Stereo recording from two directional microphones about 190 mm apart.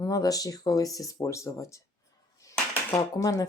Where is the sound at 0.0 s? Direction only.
20° left (ahead or behind).